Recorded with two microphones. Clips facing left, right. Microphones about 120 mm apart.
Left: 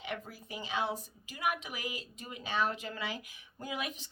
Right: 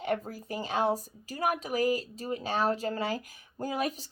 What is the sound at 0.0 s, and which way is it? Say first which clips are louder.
A woman's voice: right 9 dB; 45° right (ahead or behind).